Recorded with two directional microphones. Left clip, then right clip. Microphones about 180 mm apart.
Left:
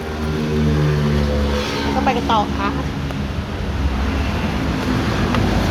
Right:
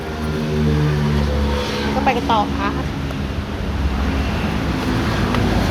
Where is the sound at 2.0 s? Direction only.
5° right (ahead or behind).